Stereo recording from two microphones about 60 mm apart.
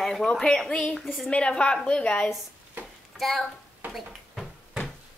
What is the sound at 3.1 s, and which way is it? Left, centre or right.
Speech, centre.